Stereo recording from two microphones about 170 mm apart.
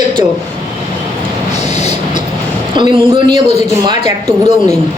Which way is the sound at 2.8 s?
30° right (ahead or behind).